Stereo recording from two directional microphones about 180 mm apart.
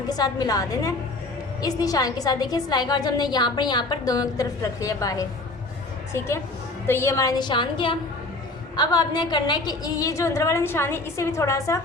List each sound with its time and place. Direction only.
0.1 s a woman's voice: 20° left (ahead or behind)